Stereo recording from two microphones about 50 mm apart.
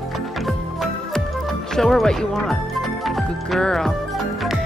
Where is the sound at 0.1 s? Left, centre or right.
Centre.